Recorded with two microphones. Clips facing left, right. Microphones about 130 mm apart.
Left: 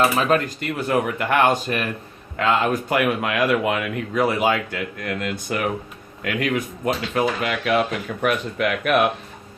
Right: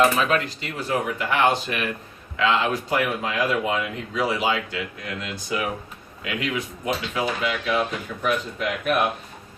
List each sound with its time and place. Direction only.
0.3 s a man's voice: 45° left (ahead or behind); by 9.0 s 70° left (ahead or behind)